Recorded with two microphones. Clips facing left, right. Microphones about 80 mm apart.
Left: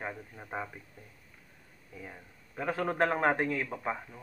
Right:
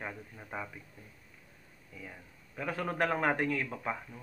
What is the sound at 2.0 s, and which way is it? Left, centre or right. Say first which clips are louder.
A man's voice: left 2 dB; left.